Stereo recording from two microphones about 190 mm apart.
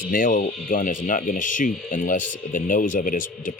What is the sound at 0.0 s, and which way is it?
Speech, 45° left (ahead or behind).